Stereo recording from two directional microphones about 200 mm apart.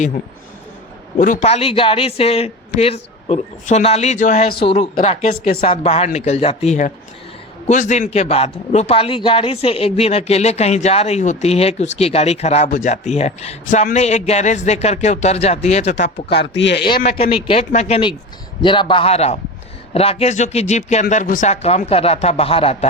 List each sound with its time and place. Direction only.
1.2 s a man's voice: 40° left (ahead or behind)
16.3 s speech: 60° left (ahead or behind)
17.1 s a man's voice: 30° left (ahead or behind)